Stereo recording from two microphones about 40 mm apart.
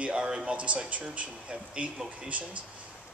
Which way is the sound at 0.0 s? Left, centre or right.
Right.